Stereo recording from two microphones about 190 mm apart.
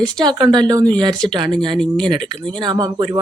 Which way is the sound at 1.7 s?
Centre (ahead or behind).